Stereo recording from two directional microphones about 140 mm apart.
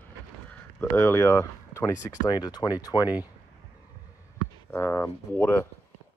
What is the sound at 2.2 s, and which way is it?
Speech, 30° left (ahead or behind).